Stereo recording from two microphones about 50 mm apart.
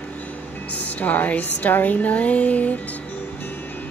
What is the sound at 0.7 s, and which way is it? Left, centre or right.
Speech, left.